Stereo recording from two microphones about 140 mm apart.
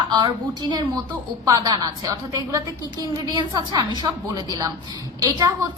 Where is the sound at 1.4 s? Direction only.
25° right (ahead or behind).